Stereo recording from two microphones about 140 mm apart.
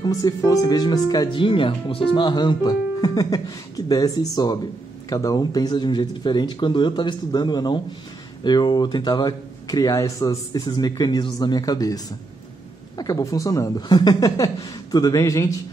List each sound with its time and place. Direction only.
0.0 s speech: 25° left (ahead or behind)